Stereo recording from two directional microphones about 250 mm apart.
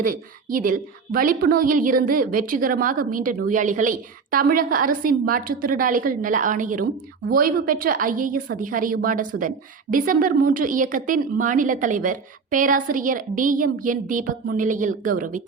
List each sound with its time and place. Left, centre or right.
0.0 s a woman's voice: right